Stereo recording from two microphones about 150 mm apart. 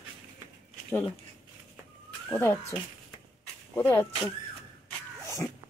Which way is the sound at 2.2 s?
15° left (ahead or behind).